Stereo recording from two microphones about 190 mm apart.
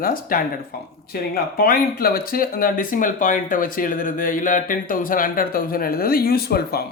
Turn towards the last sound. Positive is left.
turn(degrees=55)  # may be behind; listen again after turning